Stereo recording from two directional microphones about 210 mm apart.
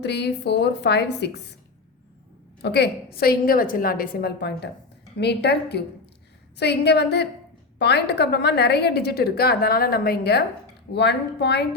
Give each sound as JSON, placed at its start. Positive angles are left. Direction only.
{"t": 0.0, "sound": "a woman's voice", "side_deg": 55}
{"t": 2.6, "sound": "a woman's voice", "side_deg": 55}